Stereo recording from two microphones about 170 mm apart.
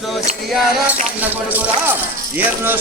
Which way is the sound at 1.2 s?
10° right (ahead or behind).